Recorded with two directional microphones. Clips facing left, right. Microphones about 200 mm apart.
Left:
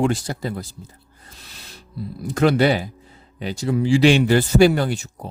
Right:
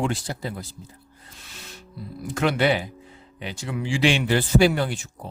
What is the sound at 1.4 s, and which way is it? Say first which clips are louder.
Music: right 1 dB; 35° left (ahead or behind).